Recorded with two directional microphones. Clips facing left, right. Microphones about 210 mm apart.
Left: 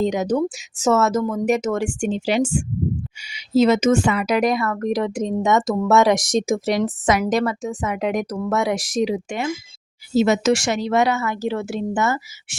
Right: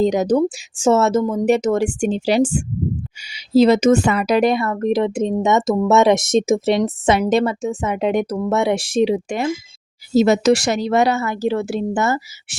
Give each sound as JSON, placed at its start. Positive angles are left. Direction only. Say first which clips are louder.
{"t": 0.0, "sound": "a woman's voice", "louder": "right 4 dB", "side_deg": -35}